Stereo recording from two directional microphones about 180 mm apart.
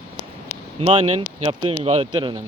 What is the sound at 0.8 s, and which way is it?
Speech, 30° right (ahead or behind).